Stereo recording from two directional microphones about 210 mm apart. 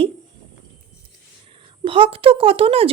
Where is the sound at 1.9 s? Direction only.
25° right (ahead or behind).